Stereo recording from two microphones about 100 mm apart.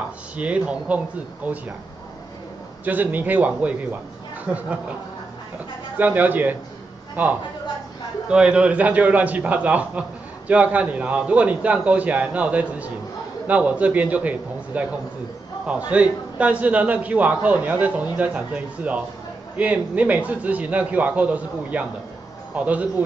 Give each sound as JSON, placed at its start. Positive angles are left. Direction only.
{"t": 0.4, "sound": "a man's voice", "side_deg": -15}
{"t": 2.8, "sound": "a man's voice", "side_deg": -15}
{"t": 5.9, "sound": "a man's voice", "side_deg": -15}